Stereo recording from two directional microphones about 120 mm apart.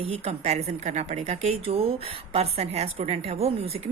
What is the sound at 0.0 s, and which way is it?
A woman's voice, 60° right (ahead or behind).